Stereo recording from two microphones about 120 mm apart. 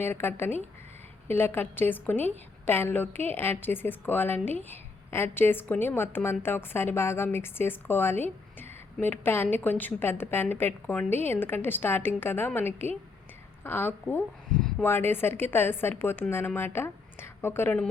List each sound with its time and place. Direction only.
0.0 s a woman's voice: 20° left (ahead or behind)